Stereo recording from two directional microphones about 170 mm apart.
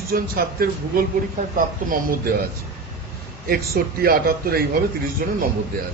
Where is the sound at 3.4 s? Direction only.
65° right (ahead or behind).